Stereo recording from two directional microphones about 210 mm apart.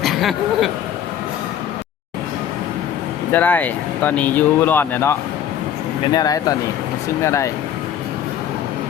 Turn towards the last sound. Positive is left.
turn(degrees=15)  # may be behind; listen again after turning